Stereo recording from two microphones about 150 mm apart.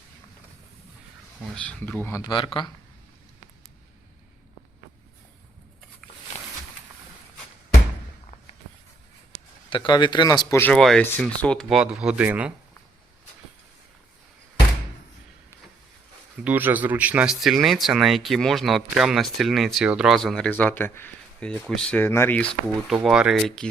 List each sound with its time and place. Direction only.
1.5 s speech: 5° left (ahead or behind)
2.3 s speech: 30° left (ahead or behind)
9.6 s speech: 30° left (ahead or behind)
10.7 s speech: 5° left (ahead or behind)
16.4 s speech: 10° right (ahead or behind); by 21.5 s 15° left (ahead or behind)
21.5 s speech: 5° left (ahead or behind)
23.0 s speech: 5° right (ahead or behind)